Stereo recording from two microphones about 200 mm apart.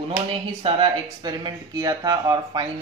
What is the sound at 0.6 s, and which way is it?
Speech, 25° right (ahead or behind).